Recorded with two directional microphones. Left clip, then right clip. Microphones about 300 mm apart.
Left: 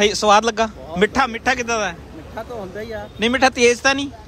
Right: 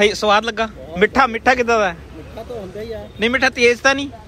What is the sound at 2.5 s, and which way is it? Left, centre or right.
Speech, left.